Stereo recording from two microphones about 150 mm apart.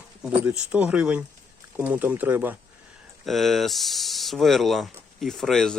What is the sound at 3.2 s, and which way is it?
Speech, centre (ahead or behind).